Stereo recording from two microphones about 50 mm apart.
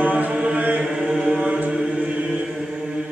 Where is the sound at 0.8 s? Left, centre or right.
Centre.